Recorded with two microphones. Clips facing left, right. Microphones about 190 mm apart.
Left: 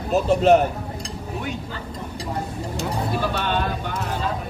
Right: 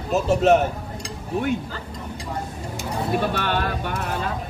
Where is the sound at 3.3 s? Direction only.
60° right (ahead or behind).